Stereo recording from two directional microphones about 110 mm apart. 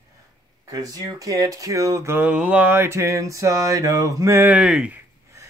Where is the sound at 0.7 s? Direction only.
35° right (ahead or behind).